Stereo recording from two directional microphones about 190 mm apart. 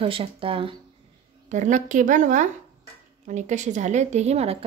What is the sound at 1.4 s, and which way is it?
Speech, 40° right (ahead or behind).